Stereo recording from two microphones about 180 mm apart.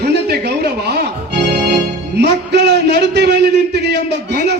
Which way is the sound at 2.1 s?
70° right (ahead or behind).